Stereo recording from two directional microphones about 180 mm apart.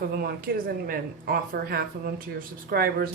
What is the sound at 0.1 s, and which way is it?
Speech, 55° right (ahead or behind).